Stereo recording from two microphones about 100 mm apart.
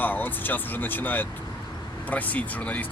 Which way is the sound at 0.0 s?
20° left (ahead or behind).